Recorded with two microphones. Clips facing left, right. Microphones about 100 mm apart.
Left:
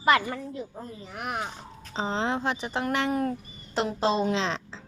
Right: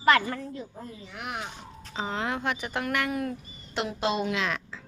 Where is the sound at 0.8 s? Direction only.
35° left (ahead or behind).